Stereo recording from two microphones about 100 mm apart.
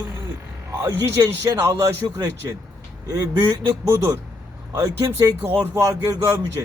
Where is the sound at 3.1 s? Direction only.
30° right (ahead or behind).